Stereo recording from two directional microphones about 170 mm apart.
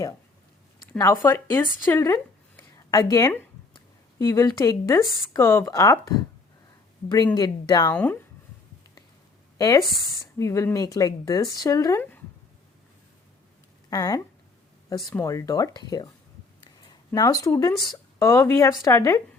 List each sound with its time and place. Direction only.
0.9 s speech: 20° left (ahead or behind)
1.9 s a sound: 15° left (ahead or behind)
4.2 s speech: 20° left (ahead or behind)
7.3 s speech: 20° left (ahead or behind)
7.9 s speech: 10° left (ahead or behind)
9.6 s speech: 20° left (ahead or behind)
13.9 s speech: 20° left (ahead or behind)
17.1 s speech: 20° left (ahead or behind)